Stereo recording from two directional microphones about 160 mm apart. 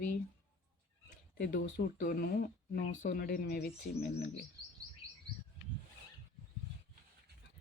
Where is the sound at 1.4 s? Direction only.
75° left (ahead or behind).